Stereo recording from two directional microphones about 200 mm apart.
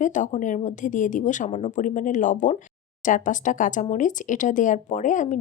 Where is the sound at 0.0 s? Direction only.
40° left (ahead or behind).